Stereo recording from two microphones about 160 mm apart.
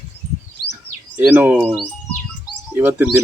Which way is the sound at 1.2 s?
10° right (ahead or behind).